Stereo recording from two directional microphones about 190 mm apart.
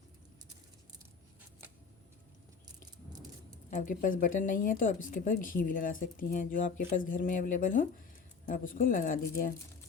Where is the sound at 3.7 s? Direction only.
40° left (ahead or behind).